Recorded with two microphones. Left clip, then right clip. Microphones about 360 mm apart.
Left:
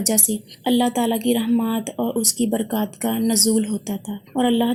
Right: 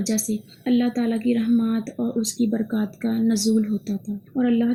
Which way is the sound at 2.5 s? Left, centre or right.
Left.